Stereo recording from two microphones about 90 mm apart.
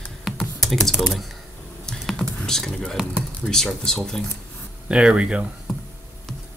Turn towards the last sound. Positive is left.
turn(degrees=-10)  # may be behind; listen again after turning